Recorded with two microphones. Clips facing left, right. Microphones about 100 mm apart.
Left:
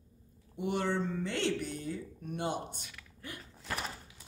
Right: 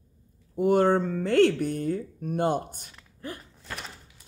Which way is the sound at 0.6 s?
45° right (ahead or behind).